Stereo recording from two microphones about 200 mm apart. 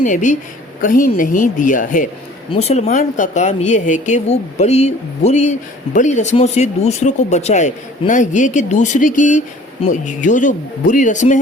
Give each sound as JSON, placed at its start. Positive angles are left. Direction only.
{"t": 0.0, "sound": "a woman's voice", "side_deg": 40}
{"t": 2.5, "sound": "a woman's voice", "side_deg": 30}